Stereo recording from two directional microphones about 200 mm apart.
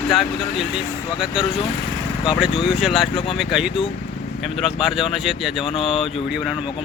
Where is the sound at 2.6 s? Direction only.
Centre (ahead or behind).